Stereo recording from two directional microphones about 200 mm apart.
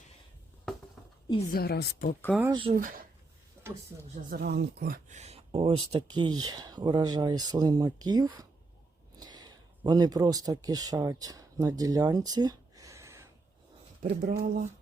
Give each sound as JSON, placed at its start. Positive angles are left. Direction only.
{"t": 1.5, "sound": "speech", "side_deg": 50}
{"t": 2.4, "sound": "speech", "side_deg": -25}
{"t": 4.3, "sound": "speech", "side_deg": -50}
{"t": 14.0, "sound": "speech", "side_deg": -45}